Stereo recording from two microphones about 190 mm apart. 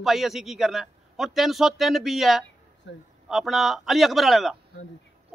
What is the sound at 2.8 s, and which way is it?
Speech, 75° left (ahead or behind).